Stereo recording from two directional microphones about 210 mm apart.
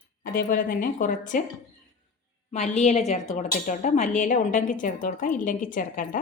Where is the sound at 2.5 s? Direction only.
35° left (ahead or behind).